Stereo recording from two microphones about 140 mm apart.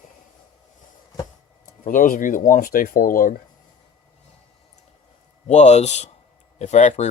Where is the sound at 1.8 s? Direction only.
70° left (ahead or behind).